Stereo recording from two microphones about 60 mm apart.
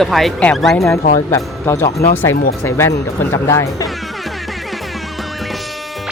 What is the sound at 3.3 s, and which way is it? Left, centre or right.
Speech, left.